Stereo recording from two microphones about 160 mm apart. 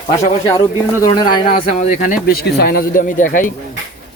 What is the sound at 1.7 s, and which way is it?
Speech, 50° left (ahead or behind).